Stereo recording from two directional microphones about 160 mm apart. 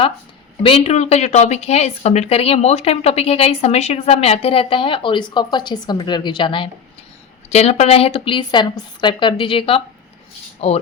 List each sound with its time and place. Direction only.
0.6 s speech: 35° left (ahead or behind)
7.5 s speech: 45° left (ahead or behind)